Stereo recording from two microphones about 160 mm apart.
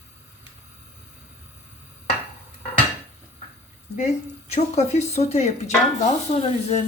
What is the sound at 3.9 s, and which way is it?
Speech, 45° left (ahead or behind).